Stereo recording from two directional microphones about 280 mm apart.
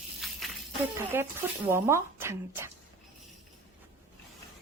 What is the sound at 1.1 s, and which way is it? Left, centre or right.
A woman's voice, centre.